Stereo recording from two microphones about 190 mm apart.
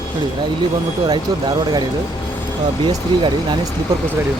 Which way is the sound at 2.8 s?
25° right (ahead or behind).